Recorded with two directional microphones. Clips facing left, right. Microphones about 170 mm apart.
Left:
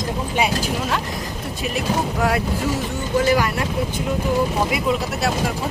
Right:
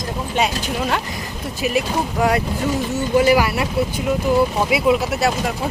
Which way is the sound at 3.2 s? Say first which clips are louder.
Right 3 dB; 10° right (ahead or behind).